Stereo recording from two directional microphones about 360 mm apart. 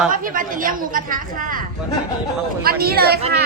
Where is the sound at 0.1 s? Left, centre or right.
Right.